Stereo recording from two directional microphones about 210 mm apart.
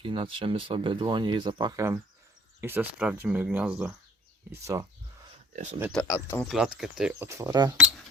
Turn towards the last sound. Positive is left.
turn(degrees=-15)  # may be behind; listen again after turning